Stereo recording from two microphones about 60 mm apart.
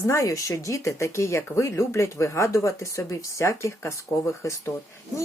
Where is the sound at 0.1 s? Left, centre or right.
Left.